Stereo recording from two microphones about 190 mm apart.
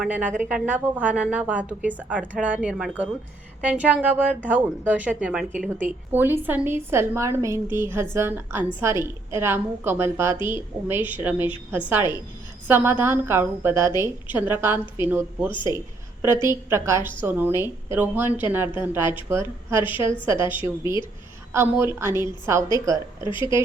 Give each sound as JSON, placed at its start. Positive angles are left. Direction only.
{"t": 0.0, "sound": "a woman's voice", "side_deg": -10}
{"t": 15.5, "sound": "speech", "side_deg": 25}
{"t": 16.2, "sound": "a woman's voice", "side_deg": -15}